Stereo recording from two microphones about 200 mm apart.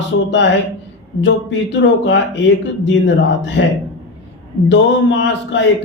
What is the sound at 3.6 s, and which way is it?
Speech, 65° left (ahead or behind).